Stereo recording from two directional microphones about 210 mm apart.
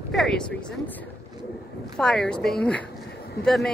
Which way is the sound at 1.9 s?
5° left (ahead or behind).